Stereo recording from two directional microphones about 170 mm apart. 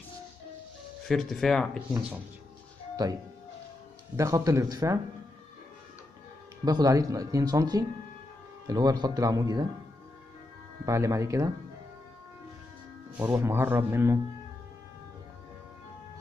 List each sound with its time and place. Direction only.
1.0 s speech: centre (ahead or behind)
3.0 s speech: 20° right (ahead or behind)
4.2 s speech: 15° right (ahead or behind)
6.6 s speech: 20° right (ahead or behind)
10.9 s speech: 20° right (ahead or behind)
13.2 s speech: 15° right (ahead or behind)